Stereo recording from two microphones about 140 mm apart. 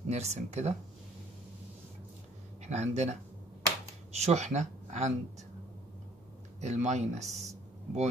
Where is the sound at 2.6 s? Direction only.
55° right (ahead or behind).